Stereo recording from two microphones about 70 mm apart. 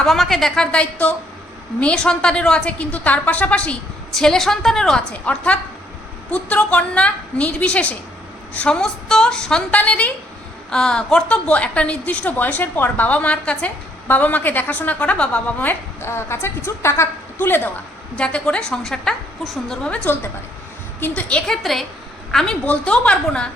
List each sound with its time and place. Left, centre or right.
0.0 s a woman's voice: centre
4.1 s a woman's voice: centre
5.1 s a woman's voice: centre
16.0 s a woman's voice: left
18.2 s a woman's voice: centre
21.0 s a woman's voice: left
21.5 s a woman's voice: centre
22.6 s a woman's voice: centre